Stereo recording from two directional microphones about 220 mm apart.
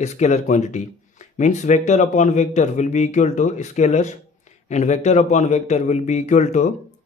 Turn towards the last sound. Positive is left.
turn(degrees=30)  # may be behind; listen again after turning